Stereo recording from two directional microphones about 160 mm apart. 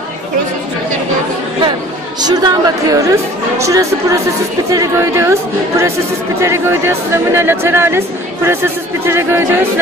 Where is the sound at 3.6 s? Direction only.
20° right (ahead or behind).